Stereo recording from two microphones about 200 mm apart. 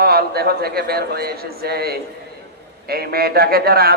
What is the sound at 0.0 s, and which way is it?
A man's voice, 50° right (ahead or behind).